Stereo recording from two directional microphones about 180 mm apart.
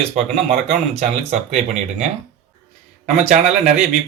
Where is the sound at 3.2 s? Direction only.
40° right (ahead or behind).